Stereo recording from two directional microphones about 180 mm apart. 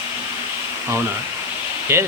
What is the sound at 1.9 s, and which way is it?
Speech, 15° right (ahead or behind).